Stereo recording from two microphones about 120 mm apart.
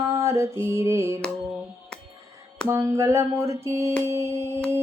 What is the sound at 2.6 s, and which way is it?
Music, 25° right (ahead or behind).